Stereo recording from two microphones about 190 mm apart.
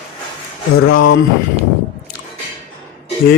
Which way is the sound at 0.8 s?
90° left.